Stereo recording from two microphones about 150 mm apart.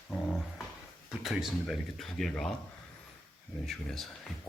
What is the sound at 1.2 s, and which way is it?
Speech, centre (ahead or behind).